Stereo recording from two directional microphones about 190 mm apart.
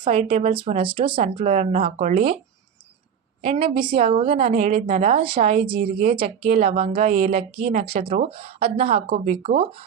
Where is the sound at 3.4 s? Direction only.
30° right (ahead or behind).